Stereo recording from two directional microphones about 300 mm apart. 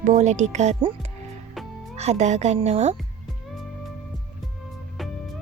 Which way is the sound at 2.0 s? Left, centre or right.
Right.